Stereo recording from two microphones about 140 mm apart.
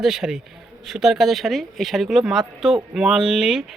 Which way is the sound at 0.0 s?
5° right (ahead or behind).